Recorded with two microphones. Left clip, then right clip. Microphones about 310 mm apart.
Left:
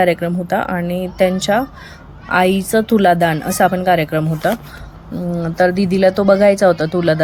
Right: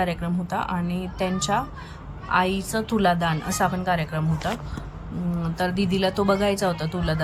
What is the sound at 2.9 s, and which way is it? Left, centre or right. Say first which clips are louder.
Speech: left 8 dB; left.